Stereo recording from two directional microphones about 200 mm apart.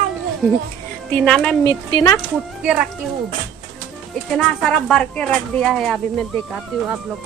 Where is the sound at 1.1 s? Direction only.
5° left (ahead or behind).